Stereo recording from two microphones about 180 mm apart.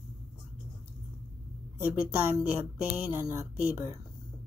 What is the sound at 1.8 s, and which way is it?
Speech, 10° right (ahead or behind).